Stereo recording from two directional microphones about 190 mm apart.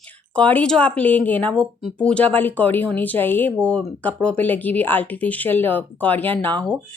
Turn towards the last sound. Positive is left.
turn(degrees=10)  # may be behind; listen again after turning